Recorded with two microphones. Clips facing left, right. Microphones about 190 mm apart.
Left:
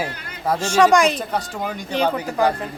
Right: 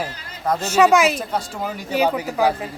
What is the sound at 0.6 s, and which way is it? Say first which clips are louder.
Speech: even; 5° right (ahead or behind).